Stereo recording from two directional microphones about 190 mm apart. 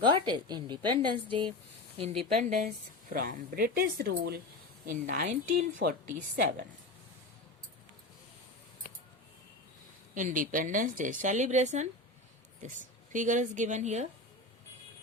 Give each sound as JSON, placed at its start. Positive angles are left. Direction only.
{"t": 0.0, "sound": "a woman's voice", "side_deg": -25}
{"t": 3.1, "sound": "a woman's voice", "side_deg": -50}
{"t": 10.2, "sound": "a woman's voice", "side_deg": -45}